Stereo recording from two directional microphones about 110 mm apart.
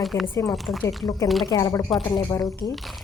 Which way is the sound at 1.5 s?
35° left (ahead or behind).